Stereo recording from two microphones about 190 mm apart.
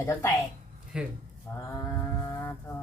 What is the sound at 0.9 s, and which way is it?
Speech, 5° right (ahead or behind).